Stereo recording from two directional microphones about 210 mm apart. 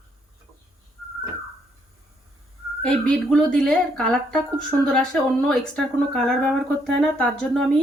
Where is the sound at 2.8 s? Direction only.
5° left (ahead or behind).